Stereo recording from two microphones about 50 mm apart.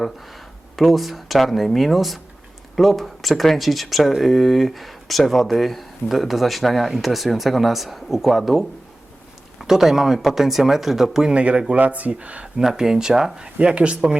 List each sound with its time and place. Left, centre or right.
0.0 s speech: centre
9.6 s speech: centre
11.3 s speech: right
12.5 s speech: centre